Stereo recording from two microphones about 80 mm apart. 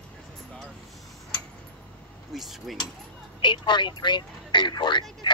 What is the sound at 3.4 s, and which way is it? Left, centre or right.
A man's voice, left.